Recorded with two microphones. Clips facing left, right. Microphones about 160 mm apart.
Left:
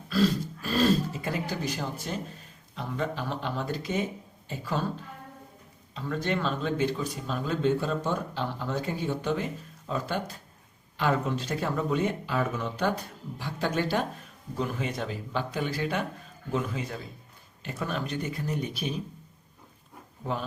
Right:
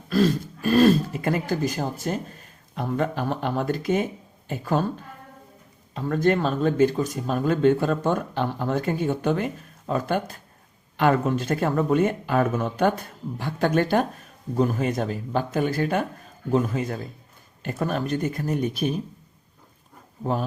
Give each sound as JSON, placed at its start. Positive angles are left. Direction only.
{"t": 0.1, "sound": "speech", "side_deg": -55}
{"t": 5.9, "sound": "speech", "side_deg": -50}